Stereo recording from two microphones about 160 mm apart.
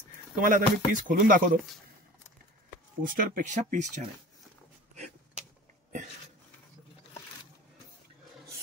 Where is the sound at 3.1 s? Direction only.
55° right (ahead or behind).